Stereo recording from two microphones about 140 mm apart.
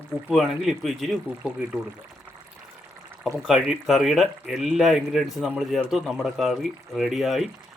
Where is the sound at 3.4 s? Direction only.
Centre (ahead or behind).